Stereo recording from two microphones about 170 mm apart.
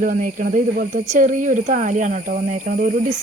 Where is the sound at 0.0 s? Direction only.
50° right (ahead or behind).